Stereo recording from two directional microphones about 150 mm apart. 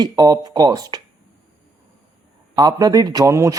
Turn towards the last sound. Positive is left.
turn(degrees=-20)  # may be behind; listen again after turning